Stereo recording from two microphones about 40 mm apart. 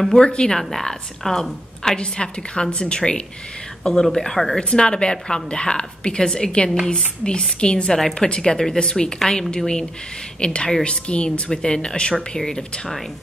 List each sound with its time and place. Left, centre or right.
0.2 s a woman's voice: left
0.6 s a woman's voice: centre
2.0 s a woman's voice: left
4.6 s a woman's voice: left